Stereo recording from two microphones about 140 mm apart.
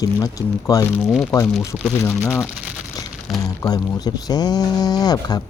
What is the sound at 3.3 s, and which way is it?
Speech, 25° left (ahead or behind).